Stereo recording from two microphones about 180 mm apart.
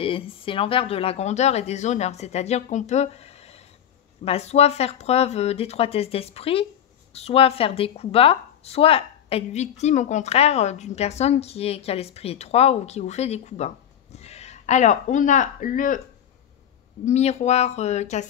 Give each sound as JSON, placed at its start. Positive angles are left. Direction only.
{"t": 0.0, "sound": "a woman's voice", "side_deg": 30}
{"t": 17.0, "sound": "a woman's voice", "side_deg": 40}